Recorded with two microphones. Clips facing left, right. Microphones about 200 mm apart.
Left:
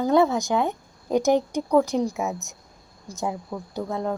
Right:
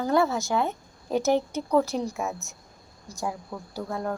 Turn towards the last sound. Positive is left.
turn(degrees=20)  # may be behind; listen again after turning